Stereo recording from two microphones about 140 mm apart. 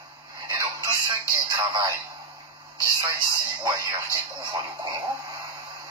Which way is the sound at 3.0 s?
20° right (ahead or behind).